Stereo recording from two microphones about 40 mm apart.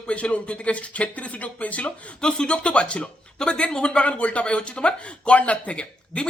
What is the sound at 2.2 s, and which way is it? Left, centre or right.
Speech, left.